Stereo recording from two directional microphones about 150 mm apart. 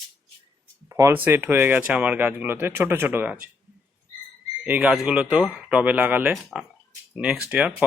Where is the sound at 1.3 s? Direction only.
15° right (ahead or behind).